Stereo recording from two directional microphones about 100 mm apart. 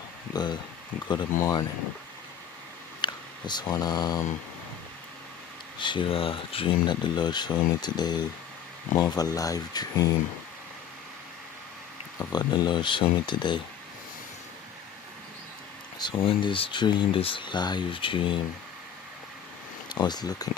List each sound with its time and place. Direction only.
0.3 s speech: 45° left (ahead or behind)
1.4 s speech: 35° left (ahead or behind)
3.0 s speech: 50° left (ahead or behind)
5.8 s speech: 55° left (ahead or behind); by 10.2 s 40° left (ahead or behind)
12.3 s speech: 45° left (ahead or behind)
16.0 s a sound: 50° left (ahead or behind)
16.2 s speech: 60° left (ahead or behind)
17.2 s speech: 60° left (ahead or behind)
19.9 s speech: 45° left (ahead or behind)